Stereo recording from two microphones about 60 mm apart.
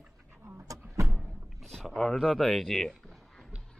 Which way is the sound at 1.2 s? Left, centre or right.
Centre.